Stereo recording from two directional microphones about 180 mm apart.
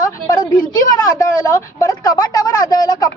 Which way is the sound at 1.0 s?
20° left (ahead or behind).